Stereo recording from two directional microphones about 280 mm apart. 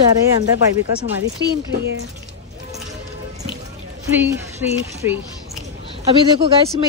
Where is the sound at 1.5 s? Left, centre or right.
Right.